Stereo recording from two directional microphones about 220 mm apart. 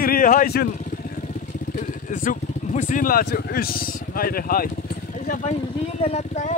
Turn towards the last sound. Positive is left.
turn(degrees=30)  # may be behind; listen again after turning